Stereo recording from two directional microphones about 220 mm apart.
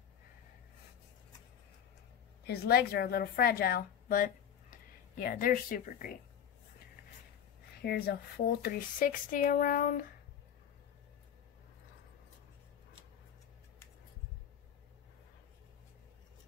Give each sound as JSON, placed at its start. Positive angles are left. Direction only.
{"t": 2.4, "sound": "a woman's voice", "side_deg": 45}
{"t": 7.8, "sound": "speech", "side_deg": 45}